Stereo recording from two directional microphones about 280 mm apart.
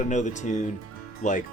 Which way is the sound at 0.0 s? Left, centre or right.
Left.